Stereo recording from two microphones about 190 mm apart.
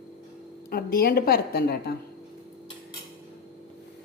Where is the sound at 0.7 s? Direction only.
50° left (ahead or behind).